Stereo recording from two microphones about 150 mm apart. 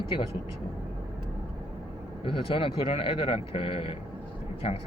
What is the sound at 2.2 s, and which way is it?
Speech, 35° left (ahead or behind).